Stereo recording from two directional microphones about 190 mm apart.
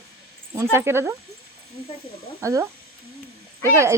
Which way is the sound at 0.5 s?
15° right (ahead or behind).